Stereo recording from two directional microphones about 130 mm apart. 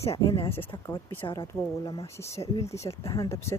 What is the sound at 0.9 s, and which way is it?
Speech, 40° left (ahead or behind).